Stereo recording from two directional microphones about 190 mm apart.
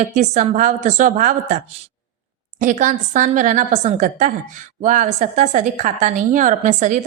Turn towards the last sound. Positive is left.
turn(degrees=-40)  # may be behind; listen again after turning